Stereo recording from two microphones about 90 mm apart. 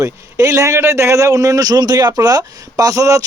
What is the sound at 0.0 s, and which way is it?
A man's voice, 35° right (ahead or behind).